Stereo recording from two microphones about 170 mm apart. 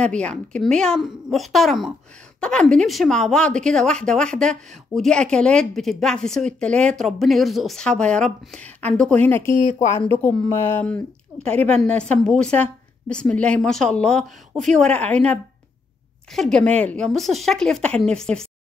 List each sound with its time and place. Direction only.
0.0 s a woman's voice: 5° left (ahead or behind)
9.6 s speech: 45° left (ahead or behind)
10.1 s a woman's voice: 15° left (ahead or behind)
16.3 s a woman's voice: 5° left (ahead or behind)